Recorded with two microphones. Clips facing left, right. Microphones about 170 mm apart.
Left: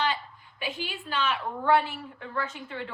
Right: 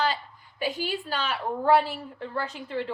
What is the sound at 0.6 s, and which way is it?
A woman's voice, 35° right (ahead or behind).